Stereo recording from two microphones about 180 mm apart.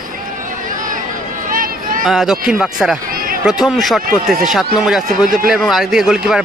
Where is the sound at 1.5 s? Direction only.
50° right (ahead or behind).